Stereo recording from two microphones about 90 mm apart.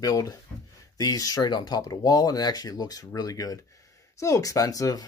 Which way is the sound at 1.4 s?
55° left (ahead or behind).